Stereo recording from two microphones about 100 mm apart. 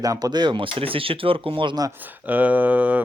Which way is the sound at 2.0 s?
20° right (ahead or behind).